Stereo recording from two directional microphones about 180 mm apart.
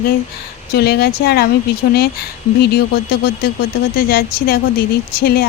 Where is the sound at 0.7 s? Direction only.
60° left (ahead or behind).